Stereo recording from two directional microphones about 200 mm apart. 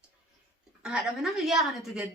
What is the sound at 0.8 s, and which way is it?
A woman's voice, 5° right (ahead or behind).